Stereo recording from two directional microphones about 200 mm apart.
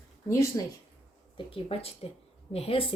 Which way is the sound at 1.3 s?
30° left (ahead or behind).